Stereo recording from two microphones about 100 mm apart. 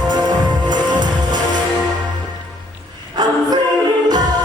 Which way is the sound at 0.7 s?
45° right (ahead or behind).